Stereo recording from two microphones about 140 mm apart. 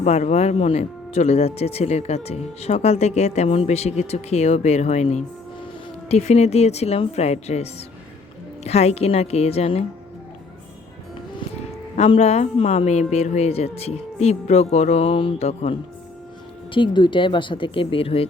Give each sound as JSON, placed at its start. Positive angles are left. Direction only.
{"t": 0.0, "sound": "speech", "side_deg": 55}
{"t": 11.3, "sound": "speech", "side_deg": 45}
{"t": 16.7, "sound": "speech", "side_deg": 35}